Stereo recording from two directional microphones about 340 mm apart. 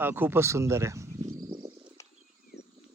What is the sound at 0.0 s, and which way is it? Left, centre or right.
Speech, centre.